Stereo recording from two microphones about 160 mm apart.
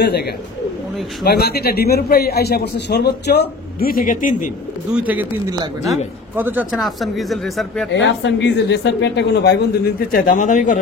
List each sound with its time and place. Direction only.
0.0 s a man's voice: 90° left; by 4.5 s 55° left (ahead or behind)
4.9 s speech: 10° right (ahead or behind)
6.3 s speech: 10° right (ahead or behind)
8.0 s speech: 90° left
10.3 s speech: 50° left (ahead or behind)